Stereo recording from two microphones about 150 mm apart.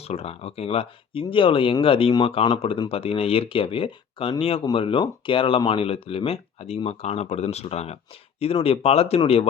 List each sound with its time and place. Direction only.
0.0 s speech: 45° left (ahead or behind)